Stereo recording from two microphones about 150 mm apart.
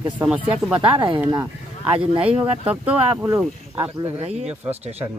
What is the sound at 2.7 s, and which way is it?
Speech, 10° right (ahead or behind).